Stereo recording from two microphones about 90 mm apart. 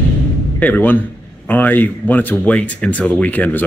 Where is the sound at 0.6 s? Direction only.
20° left (ahead or behind).